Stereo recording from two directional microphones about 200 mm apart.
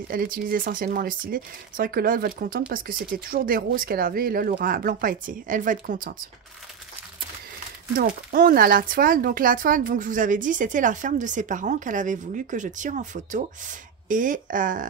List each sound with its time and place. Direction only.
0.1 s speech: 45° right (ahead or behind)
8.3 s speech: 45° right (ahead or behind)